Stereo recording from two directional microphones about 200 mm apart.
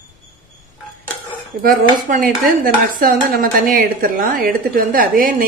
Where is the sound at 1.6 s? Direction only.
45° right (ahead or behind).